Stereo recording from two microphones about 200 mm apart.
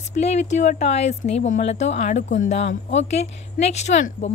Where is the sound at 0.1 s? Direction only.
35° left (ahead or behind).